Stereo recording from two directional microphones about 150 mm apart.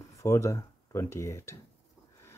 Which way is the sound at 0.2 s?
20° left (ahead or behind).